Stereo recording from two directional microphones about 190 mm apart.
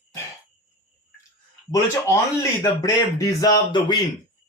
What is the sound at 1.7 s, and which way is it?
Speech, 15° left (ahead or behind).